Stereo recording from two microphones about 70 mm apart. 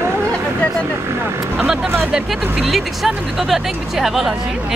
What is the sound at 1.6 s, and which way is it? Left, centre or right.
Speech, centre.